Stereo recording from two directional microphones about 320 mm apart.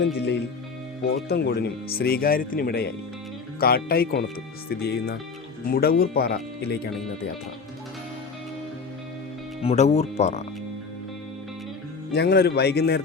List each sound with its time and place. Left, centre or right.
0.0 s a man's voice: left
9.6 s speech: centre
12.1 s a man's voice: left